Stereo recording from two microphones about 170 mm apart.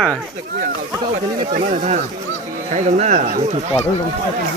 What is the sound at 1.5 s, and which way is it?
Speech, 45° right (ahead or behind).